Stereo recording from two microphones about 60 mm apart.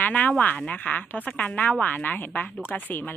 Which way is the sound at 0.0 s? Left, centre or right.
Left.